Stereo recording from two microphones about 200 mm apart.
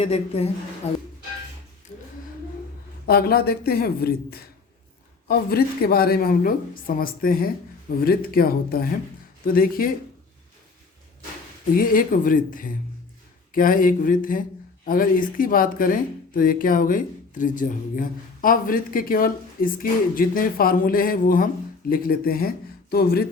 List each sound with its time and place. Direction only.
0.0 s a woman's voice: 30° left (ahead or behind)
3.1 s speech: 50° left (ahead or behind)
11.7 s speech: 45° left (ahead or behind)